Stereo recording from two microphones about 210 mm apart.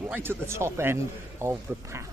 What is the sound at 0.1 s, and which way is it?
Speech, 10° right (ahead or behind).